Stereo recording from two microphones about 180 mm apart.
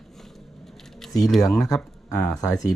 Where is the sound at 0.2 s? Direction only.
Centre (ahead or behind).